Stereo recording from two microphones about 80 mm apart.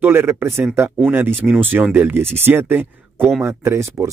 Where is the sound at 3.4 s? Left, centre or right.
Right.